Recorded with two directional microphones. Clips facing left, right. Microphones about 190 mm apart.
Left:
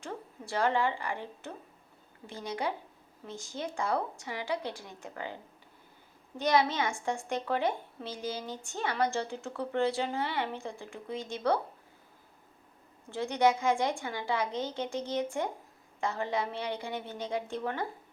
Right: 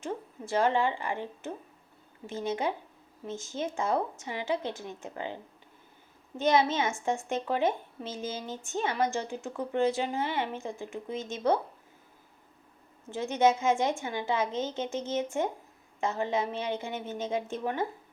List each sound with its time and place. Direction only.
0.0 s speech: 20° right (ahead or behind)
6.3 s speech: 25° right (ahead or behind)
13.1 s speech: 20° right (ahead or behind)